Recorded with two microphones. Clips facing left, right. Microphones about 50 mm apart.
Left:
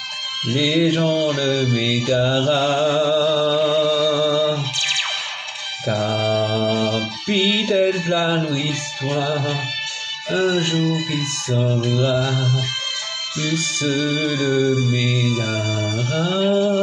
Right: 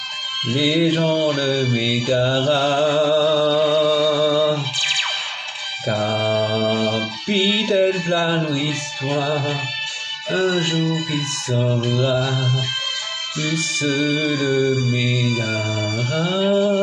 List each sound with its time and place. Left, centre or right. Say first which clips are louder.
0.5 s mantra: even; centre
3.4 s music: right 1 dB; centre
7.3 s music: even; centre
8.1 s mantra: even; centre
10.5 s mantra: left 1 dB; centre
13.4 s mantra: even; centre
15.2 s mantra: even; centre